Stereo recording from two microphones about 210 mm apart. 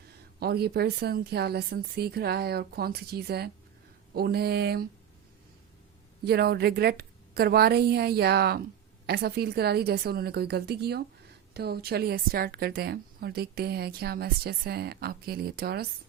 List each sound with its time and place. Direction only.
0.3 s a woman's voice: 50° right (ahead or behind)
6.2 s a woman's voice: 50° right (ahead or behind)